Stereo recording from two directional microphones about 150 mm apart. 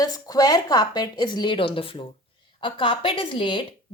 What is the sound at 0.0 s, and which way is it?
A woman's voice, 25° left (ahead or behind).